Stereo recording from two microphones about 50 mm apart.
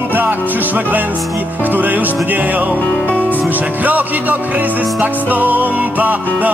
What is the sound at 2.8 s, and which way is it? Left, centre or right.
Music, left.